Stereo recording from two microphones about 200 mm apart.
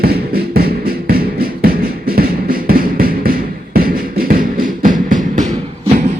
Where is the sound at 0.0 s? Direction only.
50° right (ahead or behind).